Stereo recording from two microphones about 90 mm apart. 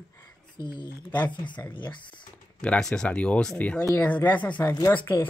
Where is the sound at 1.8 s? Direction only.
60° left (ahead or behind).